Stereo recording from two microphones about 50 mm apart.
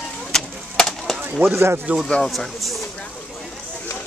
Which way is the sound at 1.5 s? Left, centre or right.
Right.